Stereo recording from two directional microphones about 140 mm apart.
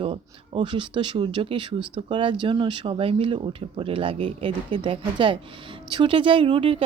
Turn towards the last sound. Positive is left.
turn(degrees=-40)  # may be behind; listen again after turning